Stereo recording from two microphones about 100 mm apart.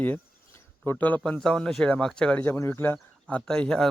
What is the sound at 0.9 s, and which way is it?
A man's voice, 15° left (ahead or behind).